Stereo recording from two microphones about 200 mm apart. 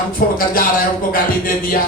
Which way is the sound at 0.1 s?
45° left (ahead or behind).